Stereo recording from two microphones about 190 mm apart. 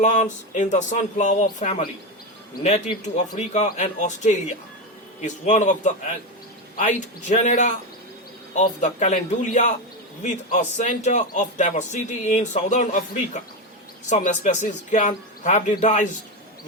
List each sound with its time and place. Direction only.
0.0 s a man's voice: 40° left (ahead or behind)
8.8 s a man's voice: 40° left (ahead or behind)